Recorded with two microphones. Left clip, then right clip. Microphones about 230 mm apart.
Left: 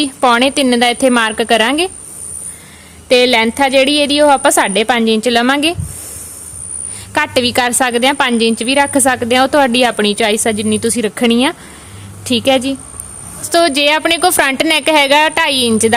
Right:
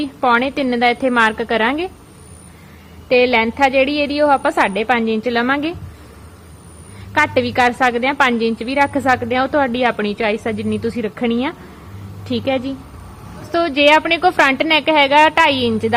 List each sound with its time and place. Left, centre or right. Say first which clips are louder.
0.0 s a woman's voice: left 4 dB; left
3.1 s a woman's voice: left 4 dB; left
7.1 s a woman's voice: left 2 dB; left